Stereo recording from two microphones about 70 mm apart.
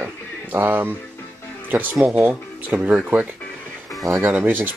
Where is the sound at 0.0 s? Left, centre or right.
Right.